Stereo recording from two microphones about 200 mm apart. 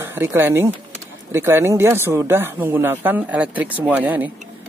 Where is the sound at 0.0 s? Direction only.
10° right (ahead or behind).